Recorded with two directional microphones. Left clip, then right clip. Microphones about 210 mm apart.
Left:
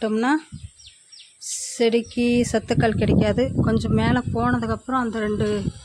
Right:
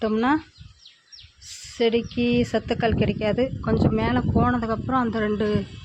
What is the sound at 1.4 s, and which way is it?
Speech, 20° left (ahead or behind).